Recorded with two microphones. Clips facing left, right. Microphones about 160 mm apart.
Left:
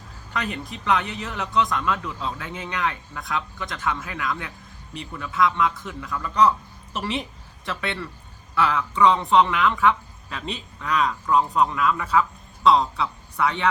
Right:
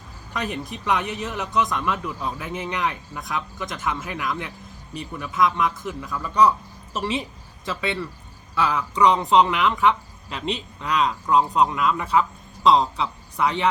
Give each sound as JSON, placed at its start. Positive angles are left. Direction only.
{"t": 0.3, "sound": "speech", "side_deg": -20}
{"t": 7.6, "sound": "speech", "side_deg": -15}